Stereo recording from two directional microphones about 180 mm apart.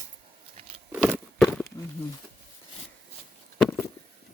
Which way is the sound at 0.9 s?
Centre (ahead or behind).